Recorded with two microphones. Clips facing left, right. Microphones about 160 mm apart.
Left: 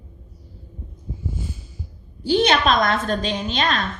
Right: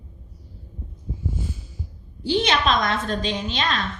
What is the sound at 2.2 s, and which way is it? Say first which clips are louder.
A woman's voice: left 3 dB; 50° left (ahead or behind).